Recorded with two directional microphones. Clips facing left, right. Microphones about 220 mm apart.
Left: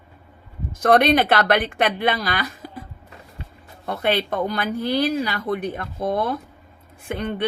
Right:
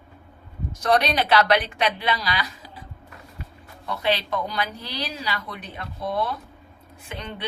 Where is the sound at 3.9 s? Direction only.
55° left (ahead or behind).